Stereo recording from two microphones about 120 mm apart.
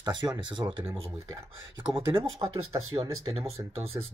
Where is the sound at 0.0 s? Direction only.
35° right (ahead or behind).